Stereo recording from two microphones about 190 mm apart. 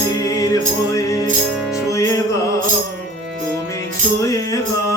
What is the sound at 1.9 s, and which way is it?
Music, 15° left (ahead or behind).